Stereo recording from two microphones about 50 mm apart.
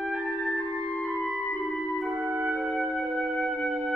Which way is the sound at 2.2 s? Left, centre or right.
Right.